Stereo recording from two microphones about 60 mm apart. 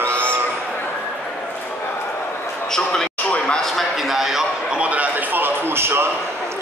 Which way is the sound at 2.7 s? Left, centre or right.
Centre.